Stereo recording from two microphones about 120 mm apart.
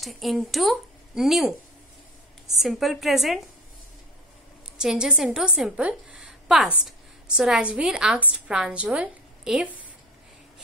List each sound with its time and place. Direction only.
0.0 s a woman's voice: centre (ahead or behind)
2.6 s a woman's voice: centre (ahead or behind)
4.7 s a woman's voice: 5° right (ahead or behind)